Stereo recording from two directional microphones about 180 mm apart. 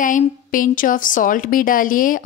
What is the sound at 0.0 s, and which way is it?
A woman's voice, 45° left (ahead or behind).